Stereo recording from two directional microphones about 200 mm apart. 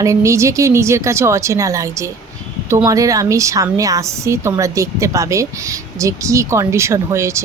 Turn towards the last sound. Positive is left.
turn(degrees=-15)  # may be behind; listen again after turning